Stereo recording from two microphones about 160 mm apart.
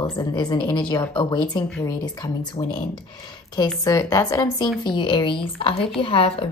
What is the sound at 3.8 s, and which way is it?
Speech, 20° left (ahead or behind).